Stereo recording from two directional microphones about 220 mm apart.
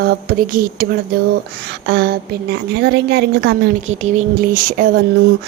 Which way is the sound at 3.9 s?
35° right (ahead or behind).